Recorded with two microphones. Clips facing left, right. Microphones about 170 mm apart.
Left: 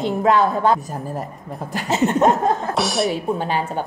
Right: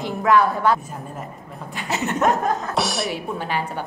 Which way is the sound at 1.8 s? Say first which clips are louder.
Left 4 dB; 25° left (ahead or behind).